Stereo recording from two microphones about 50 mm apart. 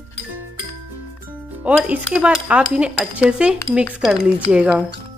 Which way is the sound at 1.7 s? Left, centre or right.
Right.